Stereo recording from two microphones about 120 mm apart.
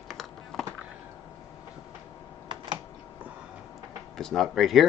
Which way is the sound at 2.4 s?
40° right (ahead or behind).